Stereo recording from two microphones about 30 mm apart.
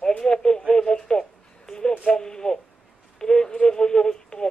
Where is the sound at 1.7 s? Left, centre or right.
Left.